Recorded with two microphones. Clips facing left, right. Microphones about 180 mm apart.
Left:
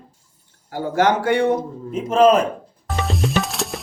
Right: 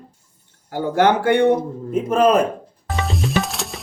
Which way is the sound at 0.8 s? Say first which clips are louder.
Right 2 dB; 60° right (ahead or behind).